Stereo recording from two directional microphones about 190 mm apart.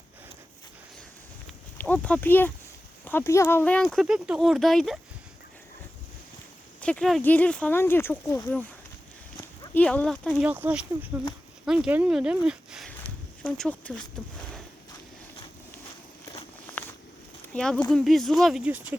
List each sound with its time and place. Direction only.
1.8 s speech: 5° left (ahead or behind)
6.8 s speech: 5° left (ahead or behind)
16.8 s a sound: 10° left (ahead or behind)
17.5 s speech: 5° left (ahead or behind)